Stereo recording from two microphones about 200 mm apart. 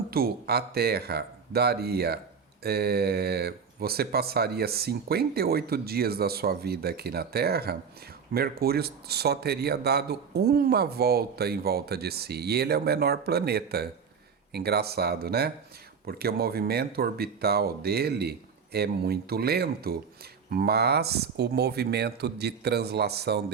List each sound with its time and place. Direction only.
0.1 s speech: 50° right (ahead or behind)